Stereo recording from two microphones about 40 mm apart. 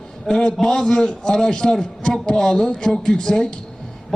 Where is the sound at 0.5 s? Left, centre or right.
Centre.